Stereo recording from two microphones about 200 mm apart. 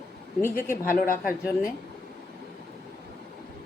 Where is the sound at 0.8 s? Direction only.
45° left (ahead or behind).